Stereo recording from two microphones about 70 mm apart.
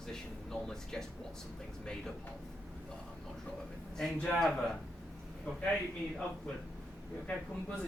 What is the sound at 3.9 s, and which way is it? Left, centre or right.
Speech, centre.